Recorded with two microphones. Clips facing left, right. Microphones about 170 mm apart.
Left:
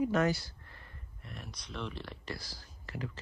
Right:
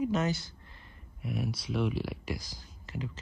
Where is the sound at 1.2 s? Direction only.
10° right (ahead or behind).